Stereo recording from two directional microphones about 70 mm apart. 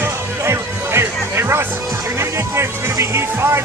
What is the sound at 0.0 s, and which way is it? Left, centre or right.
Music, right.